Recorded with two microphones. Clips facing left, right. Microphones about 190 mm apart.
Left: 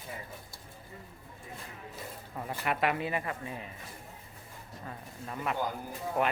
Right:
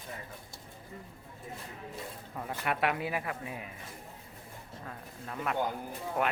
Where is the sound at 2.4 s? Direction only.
5° left (ahead or behind).